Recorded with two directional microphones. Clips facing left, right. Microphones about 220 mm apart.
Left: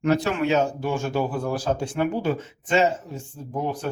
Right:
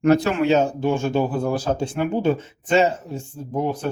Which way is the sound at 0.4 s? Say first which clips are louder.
Right 4 dB; 25° right (ahead or behind).